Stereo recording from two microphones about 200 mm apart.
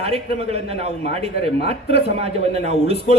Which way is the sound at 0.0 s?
30° right (ahead or behind).